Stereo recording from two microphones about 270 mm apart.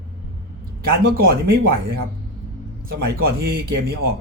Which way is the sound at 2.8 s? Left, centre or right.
Right.